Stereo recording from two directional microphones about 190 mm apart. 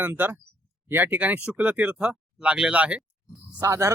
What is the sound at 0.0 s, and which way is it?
Speech, 10° right (ahead or behind).